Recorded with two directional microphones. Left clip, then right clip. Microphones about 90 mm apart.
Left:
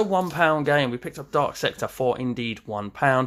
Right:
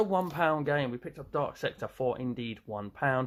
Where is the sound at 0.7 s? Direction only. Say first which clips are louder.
Left 9 dB; 30° left (ahead or behind).